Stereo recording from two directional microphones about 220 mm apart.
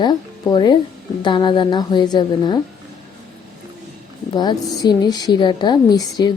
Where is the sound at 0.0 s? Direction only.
20° left (ahead or behind).